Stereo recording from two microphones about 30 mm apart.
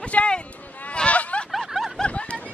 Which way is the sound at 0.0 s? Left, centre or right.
Left.